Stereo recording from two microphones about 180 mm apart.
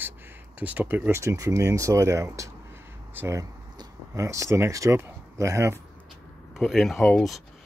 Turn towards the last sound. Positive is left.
turn(degrees=0)  # may be behind; listen again after turning